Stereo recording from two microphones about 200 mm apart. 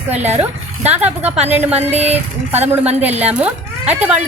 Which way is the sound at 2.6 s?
10° right (ahead or behind).